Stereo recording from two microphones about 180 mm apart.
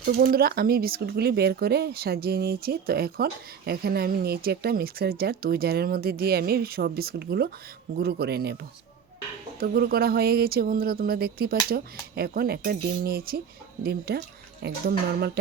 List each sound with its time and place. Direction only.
0.0 s speech: 60° right (ahead or behind)
9.6 s speech: 60° right (ahead or behind)